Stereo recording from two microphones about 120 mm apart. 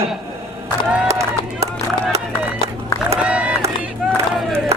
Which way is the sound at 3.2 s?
10° right (ahead or behind).